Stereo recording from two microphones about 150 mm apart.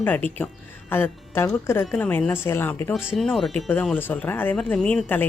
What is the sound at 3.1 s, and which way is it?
A woman's voice, centre (ahead or behind).